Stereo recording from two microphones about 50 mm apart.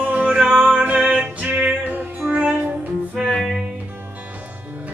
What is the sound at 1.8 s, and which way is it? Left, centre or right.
Music, right.